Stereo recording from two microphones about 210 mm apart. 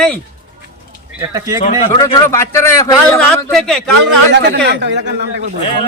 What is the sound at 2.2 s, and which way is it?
Speech, 10° left (ahead or behind).